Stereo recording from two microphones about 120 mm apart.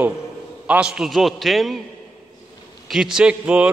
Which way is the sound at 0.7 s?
10° right (ahead or behind).